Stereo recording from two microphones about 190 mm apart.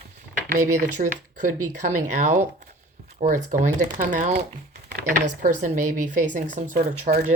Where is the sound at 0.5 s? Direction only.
40° right (ahead or behind).